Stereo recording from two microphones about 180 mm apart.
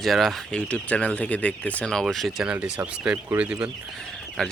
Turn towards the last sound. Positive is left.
turn(degrees=5)  # may be behind; listen again after turning